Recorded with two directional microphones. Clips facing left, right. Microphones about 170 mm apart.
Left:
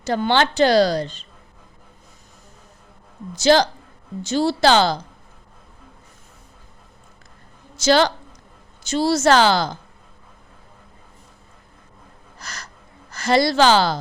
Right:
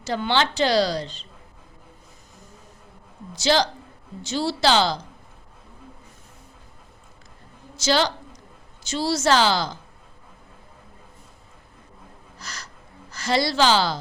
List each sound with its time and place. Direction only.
0.0 s a woman's voice: 50° left (ahead or behind)
3.3 s a woman's voice: 50° left (ahead or behind)
7.8 s a woman's voice: 55° left (ahead or behind)
12.4 s a sound: 50° left (ahead or behind)
13.1 s a woman's voice: 50° left (ahead or behind)